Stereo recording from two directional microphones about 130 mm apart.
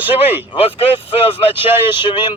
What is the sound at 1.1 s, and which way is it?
Speech, 45° left (ahead or behind).